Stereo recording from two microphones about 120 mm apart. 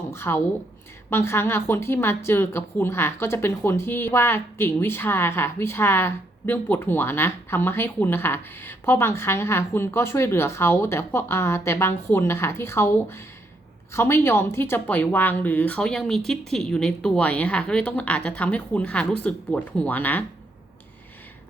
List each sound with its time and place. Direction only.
0.1 s a woman's voice: 20° left (ahead or behind)